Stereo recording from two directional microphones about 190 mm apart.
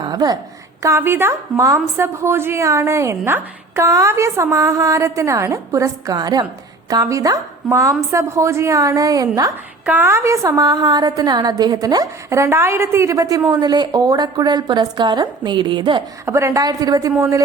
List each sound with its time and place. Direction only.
0.0 s a woman's voice: 20° right (ahead or behind)